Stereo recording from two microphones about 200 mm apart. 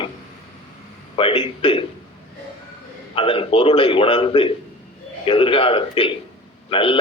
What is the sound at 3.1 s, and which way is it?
A man's voice, 25° left (ahead or behind).